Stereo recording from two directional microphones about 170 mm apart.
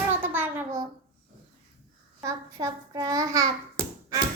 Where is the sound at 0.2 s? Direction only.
10° right (ahead or behind).